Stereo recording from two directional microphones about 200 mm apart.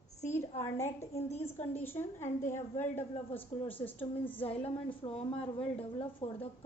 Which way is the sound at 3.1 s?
30° left (ahead or behind).